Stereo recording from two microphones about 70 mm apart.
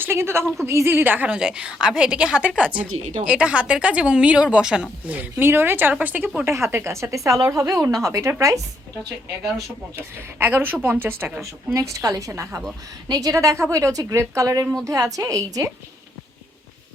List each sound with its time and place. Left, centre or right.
0.0 s speech: right
1.3 s a woman's voice: centre
5.0 s a woman's voice: right
6.4 s a woman's voice: right
9.9 s a woman's voice: right
11.3 s a woman's voice: right